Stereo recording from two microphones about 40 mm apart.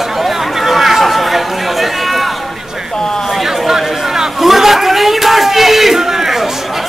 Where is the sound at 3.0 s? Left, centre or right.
Centre.